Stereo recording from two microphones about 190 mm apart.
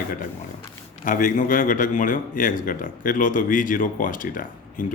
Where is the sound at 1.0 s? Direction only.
45° left (ahead or behind).